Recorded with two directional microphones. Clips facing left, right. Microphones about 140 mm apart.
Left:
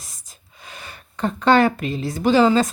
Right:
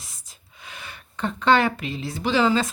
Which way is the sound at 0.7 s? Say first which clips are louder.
Left 1 dB; 40° left (ahead or behind).